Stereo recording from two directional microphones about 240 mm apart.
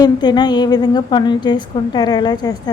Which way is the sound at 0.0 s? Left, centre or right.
Centre.